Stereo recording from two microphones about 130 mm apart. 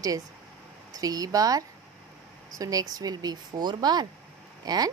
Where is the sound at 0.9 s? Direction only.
30° right (ahead or behind).